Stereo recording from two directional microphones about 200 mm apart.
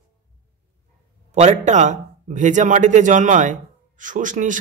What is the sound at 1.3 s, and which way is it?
A man's voice, 35° right (ahead or behind).